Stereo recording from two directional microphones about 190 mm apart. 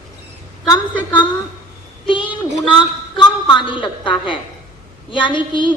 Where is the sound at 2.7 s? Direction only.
25° left (ahead or behind).